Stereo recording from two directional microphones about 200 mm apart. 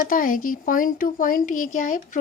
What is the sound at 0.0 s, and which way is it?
Speech, 45° left (ahead or behind).